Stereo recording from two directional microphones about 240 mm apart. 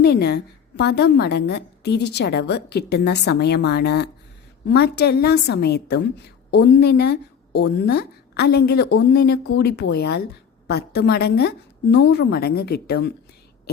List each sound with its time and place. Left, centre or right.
0.0 s a woman's voice: left